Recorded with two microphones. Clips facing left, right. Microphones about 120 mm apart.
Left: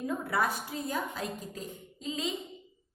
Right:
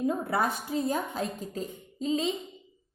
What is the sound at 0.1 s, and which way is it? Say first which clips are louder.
A woman's voice: right 2 dB; 25° right (ahead or behind).